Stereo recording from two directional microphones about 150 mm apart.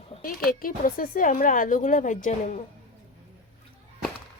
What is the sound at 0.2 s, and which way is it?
Speech, 70° left (ahead or behind).